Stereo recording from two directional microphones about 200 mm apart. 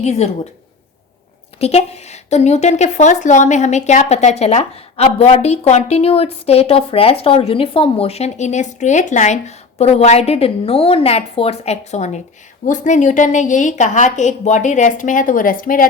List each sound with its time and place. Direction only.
0.0 s a woman's voice: 35° left (ahead or behind)
1.5 s a woman's voice: 30° left (ahead or behind)